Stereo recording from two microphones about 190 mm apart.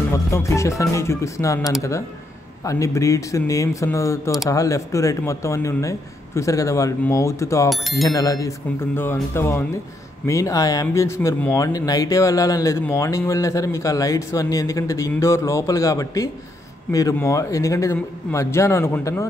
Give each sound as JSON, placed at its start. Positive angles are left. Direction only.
{"t": 0.1, "sound": "speech", "side_deg": 15}